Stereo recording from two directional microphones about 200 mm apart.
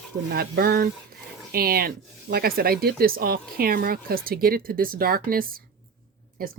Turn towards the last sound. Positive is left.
turn(degrees=-45)  # may be behind; listen again after turning